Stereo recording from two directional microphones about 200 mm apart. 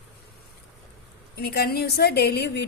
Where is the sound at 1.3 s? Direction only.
50° left (ahead or behind).